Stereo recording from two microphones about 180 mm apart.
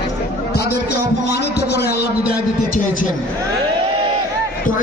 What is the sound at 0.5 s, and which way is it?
A man's voice, 65° left (ahead or behind).